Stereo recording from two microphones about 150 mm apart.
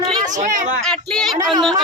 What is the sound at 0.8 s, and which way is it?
Speech, 5° left (ahead or behind).